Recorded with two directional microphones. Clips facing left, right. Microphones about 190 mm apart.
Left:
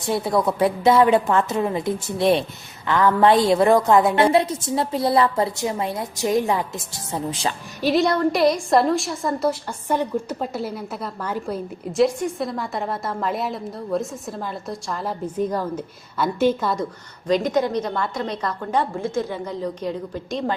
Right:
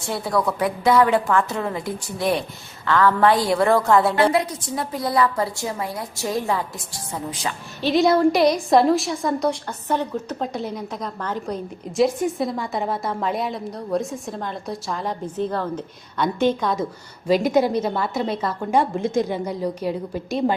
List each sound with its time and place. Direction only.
0.0 s a woman's voice: 20° left (ahead or behind)
7.9 s a woman's voice: 5° right (ahead or behind)
17.2 s a woman's voice: 10° right (ahead or behind)